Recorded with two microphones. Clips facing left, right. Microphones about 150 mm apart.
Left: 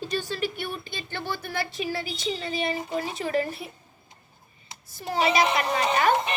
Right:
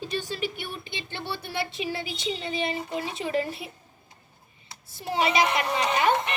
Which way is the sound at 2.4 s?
25° right (ahead or behind).